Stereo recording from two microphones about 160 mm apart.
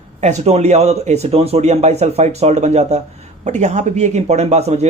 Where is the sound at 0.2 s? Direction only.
45° right (ahead or behind).